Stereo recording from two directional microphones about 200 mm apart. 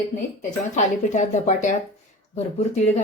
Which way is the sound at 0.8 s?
35° left (ahead or behind).